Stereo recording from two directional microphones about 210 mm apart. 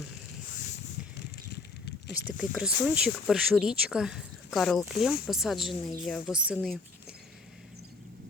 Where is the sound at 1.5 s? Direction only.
50° left (ahead or behind).